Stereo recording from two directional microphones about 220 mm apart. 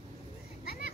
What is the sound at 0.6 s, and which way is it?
Children playing, 45° left (ahead or behind).